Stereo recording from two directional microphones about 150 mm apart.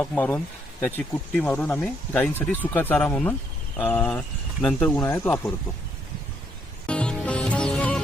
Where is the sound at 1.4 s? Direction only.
10° left (ahead or behind).